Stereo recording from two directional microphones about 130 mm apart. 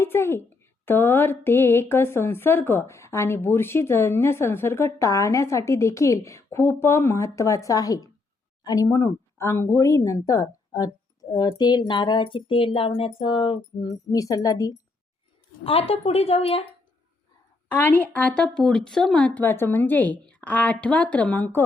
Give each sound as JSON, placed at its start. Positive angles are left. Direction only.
{"t": 0.0, "sound": "speech", "side_deg": 20}
{"t": 13.8, "sound": "speech", "side_deg": 25}
{"t": 15.6, "sound": "a woman's voice", "side_deg": 45}
{"t": 17.7, "sound": "speech", "side_deg": 15}